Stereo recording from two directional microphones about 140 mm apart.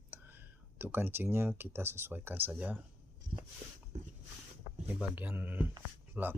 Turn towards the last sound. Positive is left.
turn(degrees=-10)  # may be behind; listen again after turning